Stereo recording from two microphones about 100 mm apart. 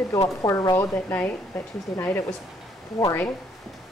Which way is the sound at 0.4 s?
35° left (ahead or behind).